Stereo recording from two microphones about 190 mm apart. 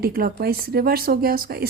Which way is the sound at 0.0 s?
50° right (ahead or behind).